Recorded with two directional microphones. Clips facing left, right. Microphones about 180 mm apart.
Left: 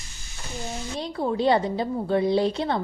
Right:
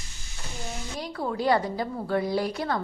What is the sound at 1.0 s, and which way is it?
Speech, 25° left (ahead or behind).